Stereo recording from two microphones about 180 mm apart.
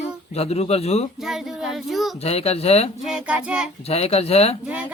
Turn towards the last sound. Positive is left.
turn(degrees=35)  # may be behind; listen again after turning